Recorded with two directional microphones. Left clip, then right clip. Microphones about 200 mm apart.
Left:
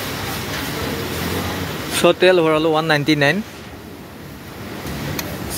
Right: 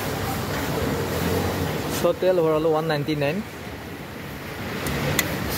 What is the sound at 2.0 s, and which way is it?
Speech, 10° left (ahead or behind).